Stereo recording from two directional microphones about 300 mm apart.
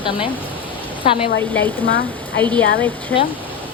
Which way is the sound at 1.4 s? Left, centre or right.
Centre.